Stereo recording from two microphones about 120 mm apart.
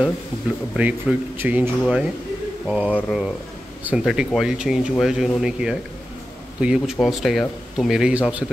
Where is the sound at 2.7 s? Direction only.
10° right (ahead or behind).